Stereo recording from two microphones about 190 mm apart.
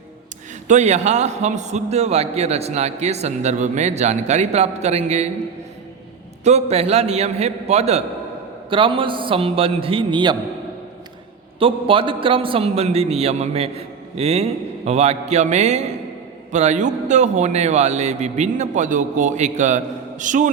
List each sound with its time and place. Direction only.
0.7 s a man's voice: 35° right (ahead or behind)
6.4 s a man's voice: 35° right (ahead or behind)
11.6 s a man's voice: 30° right (ahead or behind)